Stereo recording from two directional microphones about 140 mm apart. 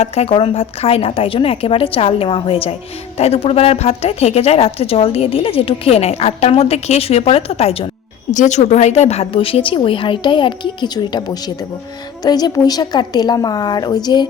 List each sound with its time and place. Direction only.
0.0 s a woman's voice: 45° left (ahead or behind)
8.3 s a woman's voice: 60° left (ahead or behind); by 14.3 s 30° left (ahead or behind)